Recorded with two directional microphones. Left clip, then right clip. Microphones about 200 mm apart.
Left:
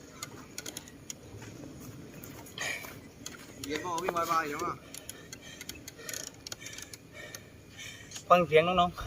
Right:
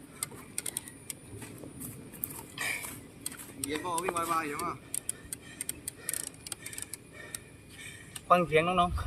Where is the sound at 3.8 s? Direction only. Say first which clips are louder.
Left 1 dB; 55° right (ahead or behind).